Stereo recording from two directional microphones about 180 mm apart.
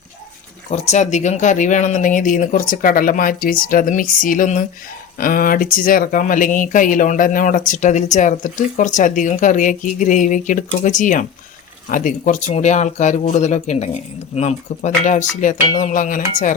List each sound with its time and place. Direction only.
0.7 s speech: 40° left (ahead or behind)